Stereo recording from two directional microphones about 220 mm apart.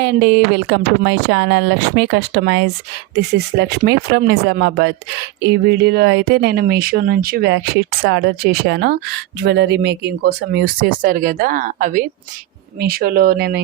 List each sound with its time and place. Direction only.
0.0 s speech: 50° right (ahead or behind)